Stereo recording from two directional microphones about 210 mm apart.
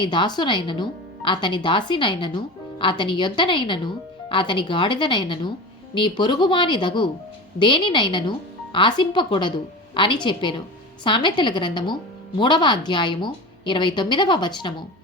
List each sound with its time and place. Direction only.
0.0 s speech: 20° left (ahead or behind)